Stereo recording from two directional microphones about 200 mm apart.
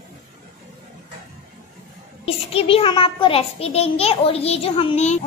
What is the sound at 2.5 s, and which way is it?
A child's voice, 30° left (ahead or behind).